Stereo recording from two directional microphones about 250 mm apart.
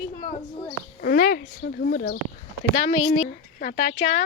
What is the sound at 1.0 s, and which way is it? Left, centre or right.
Speech, left.